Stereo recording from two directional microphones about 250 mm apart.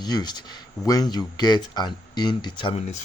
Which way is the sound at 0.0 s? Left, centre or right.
Centre.